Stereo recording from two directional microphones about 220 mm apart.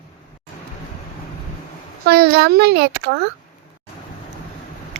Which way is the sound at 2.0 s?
45° right (ahead or behind).